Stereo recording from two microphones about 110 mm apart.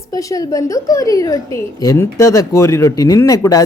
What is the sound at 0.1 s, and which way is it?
A woman's voice, 30° left (ahead or behind).